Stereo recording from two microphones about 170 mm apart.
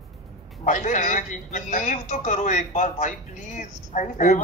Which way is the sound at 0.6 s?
45° left (ahead or behind).